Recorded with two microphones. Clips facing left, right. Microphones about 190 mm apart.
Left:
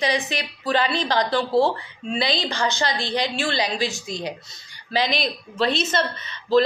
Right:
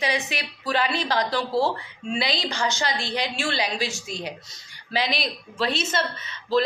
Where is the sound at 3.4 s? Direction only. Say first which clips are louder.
Left 3 dB; 5° right (ahead or behind).